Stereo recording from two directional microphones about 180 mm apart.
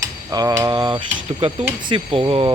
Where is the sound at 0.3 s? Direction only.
20° right (ahead or behind).